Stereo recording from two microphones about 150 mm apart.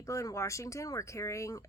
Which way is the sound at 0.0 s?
20° left (ahead or behind).